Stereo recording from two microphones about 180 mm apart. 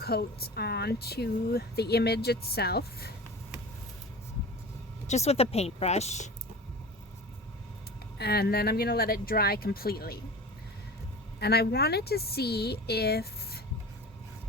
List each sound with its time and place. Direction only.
0.0 s speech: 60° left (ahead or behind)
5.0 s speech: 35° left (ahead or behind)
8.2 s speech: 60° left (ahead or behind)
11.3 s speech: 65° left (ahead or behind)